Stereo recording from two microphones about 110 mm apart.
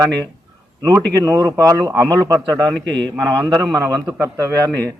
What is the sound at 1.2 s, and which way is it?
A man's voice, 30° right (ahead or behind).